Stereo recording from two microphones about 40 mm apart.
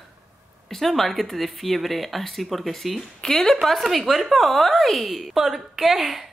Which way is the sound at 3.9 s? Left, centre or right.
Centre.